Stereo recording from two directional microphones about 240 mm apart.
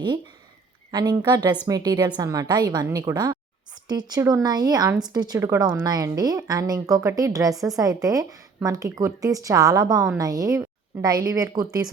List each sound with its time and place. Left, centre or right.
0.9 s speech: centre